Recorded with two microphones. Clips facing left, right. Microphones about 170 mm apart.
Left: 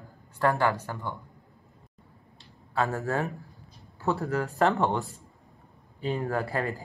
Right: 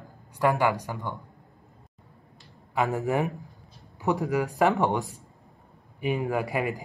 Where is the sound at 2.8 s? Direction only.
15° right (ahead or behind).